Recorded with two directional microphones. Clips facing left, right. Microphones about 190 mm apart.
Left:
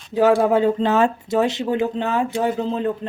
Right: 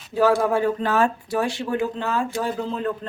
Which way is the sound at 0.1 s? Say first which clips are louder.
Left 3 dB; 20° left (ahead or behind).